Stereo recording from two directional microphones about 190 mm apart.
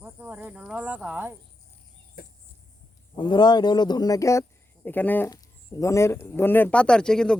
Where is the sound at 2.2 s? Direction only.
50° left (ahead or behind).